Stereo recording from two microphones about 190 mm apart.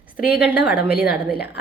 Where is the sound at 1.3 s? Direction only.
60° left (ahead or behind).